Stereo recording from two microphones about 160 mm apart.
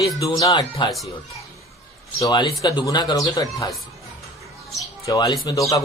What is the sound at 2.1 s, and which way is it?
Speech, 25° left (ahead or behind).